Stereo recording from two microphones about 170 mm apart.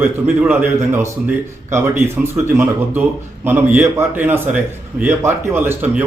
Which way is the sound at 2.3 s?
10° right (ahead or behind).